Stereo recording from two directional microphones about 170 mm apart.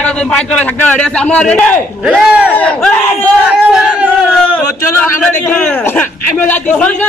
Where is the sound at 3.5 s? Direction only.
5° right (ahead or behind).